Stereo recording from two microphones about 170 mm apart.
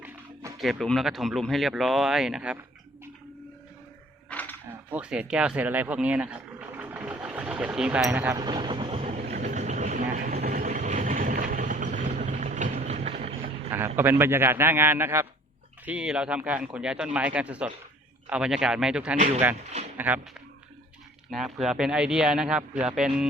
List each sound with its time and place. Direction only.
0.6 s a man's voice: centre (ahead or behind)
4.3 s a sound: 10° left (ahead or behind)
4.9 s speech: 5° right (ahead or behind)
8.4 s vehicle: 25° right (ahead or behind); by 10.7 s 60° right (ahead or behind)
10.7 s vehicle: 45° right (ahead or behind)
13.7 s a man's voice: 15° right (ahead or behind)
21.2 s a man's voice: centre (ahead or behind)